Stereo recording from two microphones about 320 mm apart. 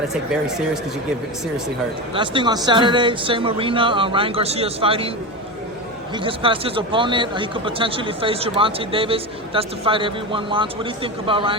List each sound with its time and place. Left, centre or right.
0.4 s speech: centre
2.1 s speech: centre
6.1 s speech: centre